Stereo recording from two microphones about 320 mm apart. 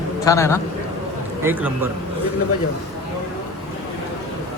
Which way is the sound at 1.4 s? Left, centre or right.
Centre.